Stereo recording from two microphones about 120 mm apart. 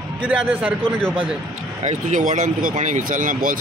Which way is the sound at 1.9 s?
85° right.